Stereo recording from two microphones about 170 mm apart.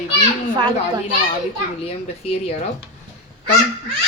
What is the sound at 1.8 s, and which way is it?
Speech, 35° left (ahead or behind).